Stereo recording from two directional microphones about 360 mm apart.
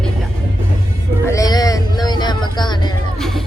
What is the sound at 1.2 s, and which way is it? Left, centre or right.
Speech, centre.